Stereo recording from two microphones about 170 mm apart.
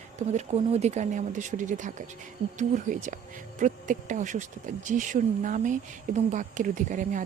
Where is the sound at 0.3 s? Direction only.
40° right (ahead or behind).